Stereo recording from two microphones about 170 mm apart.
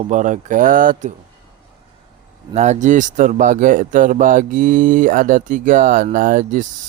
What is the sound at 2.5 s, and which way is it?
Speech, 40° right (ahead or behind).